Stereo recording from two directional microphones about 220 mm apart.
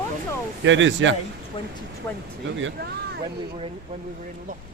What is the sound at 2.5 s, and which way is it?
Speech, 55° right (ahead or behind).